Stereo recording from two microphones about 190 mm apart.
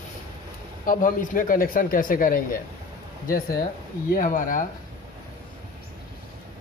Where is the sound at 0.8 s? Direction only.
45° left (ahead or behind).